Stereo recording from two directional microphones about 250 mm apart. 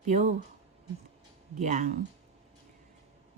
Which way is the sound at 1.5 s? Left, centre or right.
Right.